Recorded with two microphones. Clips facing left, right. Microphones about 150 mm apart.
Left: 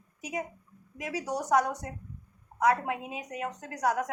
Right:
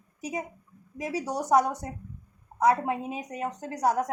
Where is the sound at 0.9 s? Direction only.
30° right (ahead or behind).